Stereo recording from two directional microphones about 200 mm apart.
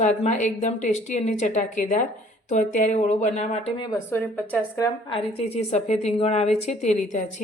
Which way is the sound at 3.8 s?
15° left (ahead or behind).